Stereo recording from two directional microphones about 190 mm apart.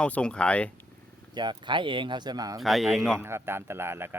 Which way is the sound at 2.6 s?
Centre (ahead or behind).